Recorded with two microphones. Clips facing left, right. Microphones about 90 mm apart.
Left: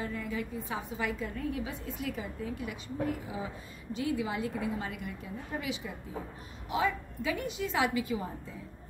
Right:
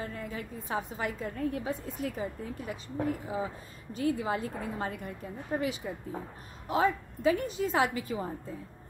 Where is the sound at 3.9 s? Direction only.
40° right (ahead or behind).